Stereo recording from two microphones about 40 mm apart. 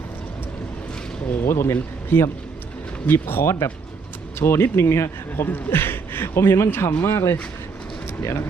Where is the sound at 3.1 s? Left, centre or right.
Left.